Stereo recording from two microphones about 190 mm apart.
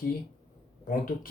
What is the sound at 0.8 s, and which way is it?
Speech, 45° left (ahead or behind).